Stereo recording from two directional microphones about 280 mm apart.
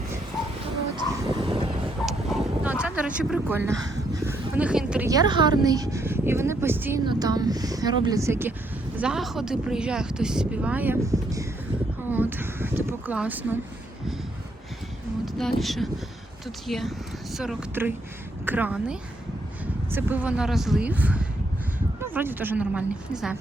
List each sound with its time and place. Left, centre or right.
1.1 s vehicle: centre
2.0 s a sound: centre
2.8 s speech: centre
15.4 s speech: centre